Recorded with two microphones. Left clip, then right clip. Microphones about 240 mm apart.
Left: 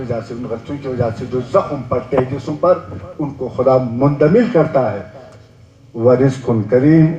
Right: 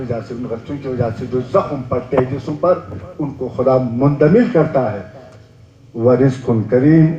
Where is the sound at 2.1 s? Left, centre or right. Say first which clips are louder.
Right 2 dB; left.